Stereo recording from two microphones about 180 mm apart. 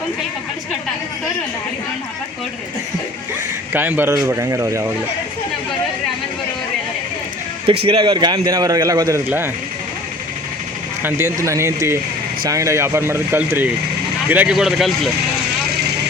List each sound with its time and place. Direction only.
3.7 s speech: 10° right (ahead or behind)
7.7 s a man's voice: 30° right (ahead or behind); by 9.5 s 15° right (ahead or behind)
11.0 s speech: 15° right (ahead or behind)